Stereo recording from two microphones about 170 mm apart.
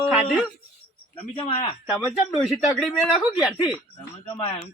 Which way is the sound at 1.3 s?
35° left (ahead or behind).